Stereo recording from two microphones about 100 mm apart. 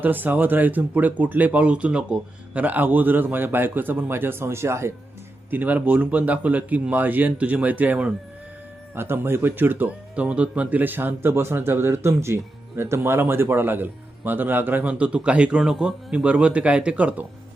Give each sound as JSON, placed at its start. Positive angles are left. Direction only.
{"t": 0.0, "sound": "a man's voice", "side_deg": -20}